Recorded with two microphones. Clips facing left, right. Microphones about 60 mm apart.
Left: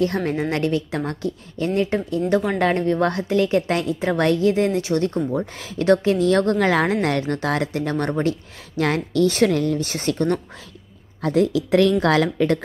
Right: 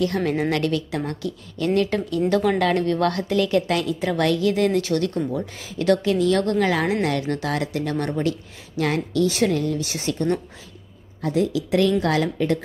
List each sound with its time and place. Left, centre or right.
0.0 s a woman's voice: left
1.8 s a woman's voice: centre; by 12.5 s left